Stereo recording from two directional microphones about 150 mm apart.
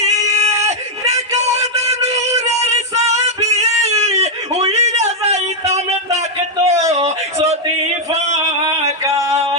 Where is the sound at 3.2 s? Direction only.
50° right (ahead or behind).